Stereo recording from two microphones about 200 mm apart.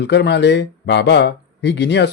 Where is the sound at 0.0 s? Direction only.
55° left (ahead or behind).